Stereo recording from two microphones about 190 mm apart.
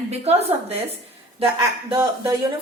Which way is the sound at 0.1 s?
35° right (ahead or behind).